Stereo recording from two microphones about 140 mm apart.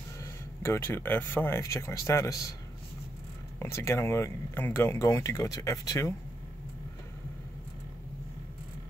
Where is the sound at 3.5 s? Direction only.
20° left (ahead or behind).